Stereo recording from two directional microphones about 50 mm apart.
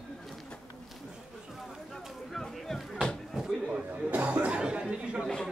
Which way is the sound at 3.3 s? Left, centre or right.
Centre.